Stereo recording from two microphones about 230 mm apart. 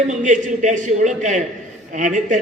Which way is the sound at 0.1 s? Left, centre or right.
Right.